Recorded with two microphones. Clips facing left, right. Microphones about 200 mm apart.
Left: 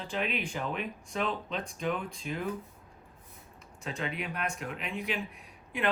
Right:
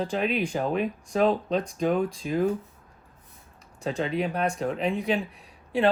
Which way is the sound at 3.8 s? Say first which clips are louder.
Right 9 dB; 35° right (ahead or behind).